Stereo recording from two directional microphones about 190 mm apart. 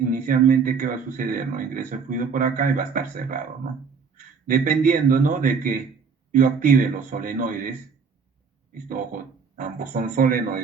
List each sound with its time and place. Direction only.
0.0 s a man's voice: 45° right (ahead or behind)
8.7 s a man's voice: 45° right (ahead or behind)